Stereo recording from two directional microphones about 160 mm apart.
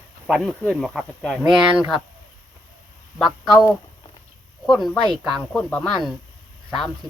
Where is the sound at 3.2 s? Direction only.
Centre (ahead or behind).